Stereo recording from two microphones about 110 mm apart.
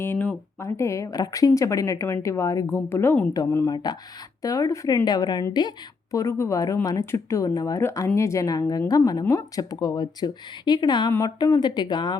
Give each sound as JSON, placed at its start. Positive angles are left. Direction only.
{"t": 0.0, "sound": "a woman's voice", "side_deg": 15}
{"t": 3.9, "sound": "a woman's voice", "side_deg": 35}